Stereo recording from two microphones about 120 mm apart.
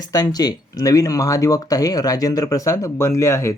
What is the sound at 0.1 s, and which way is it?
Speech, 30° left (ahead or behind).